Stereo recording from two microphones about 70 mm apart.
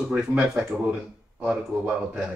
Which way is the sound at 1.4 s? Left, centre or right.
Centre.